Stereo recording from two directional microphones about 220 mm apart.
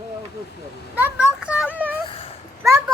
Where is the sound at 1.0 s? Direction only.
5° right (ahead or behind).